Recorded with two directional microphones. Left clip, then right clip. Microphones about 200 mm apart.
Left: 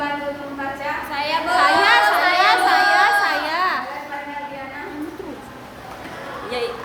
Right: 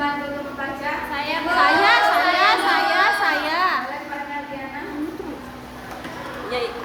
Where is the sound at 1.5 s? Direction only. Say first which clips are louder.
Left 1 dB; 10° left (ahead or behind).